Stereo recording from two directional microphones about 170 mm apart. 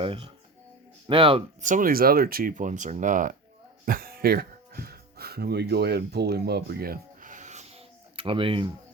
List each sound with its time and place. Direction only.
0.0 s speech: 30° right (ahead or behind)
1.6 s speech: 50° right (ahead or behind)
3.8 s music: 60° right (ahead or behind); by 8.7 s 30° right (ahead or behind)